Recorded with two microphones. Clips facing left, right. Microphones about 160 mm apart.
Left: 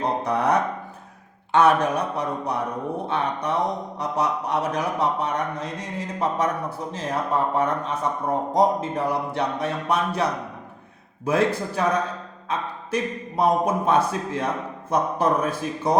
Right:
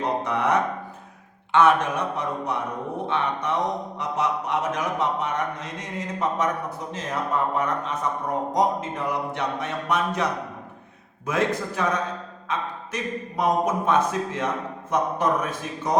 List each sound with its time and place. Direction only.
0.0 s speech: 35° left (ahead or behind)
11.3 s speech: 35° left (ahead or behind)